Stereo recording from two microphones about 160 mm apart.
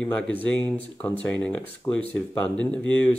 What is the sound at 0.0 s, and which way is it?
Speech, 10° left (ahead or behind).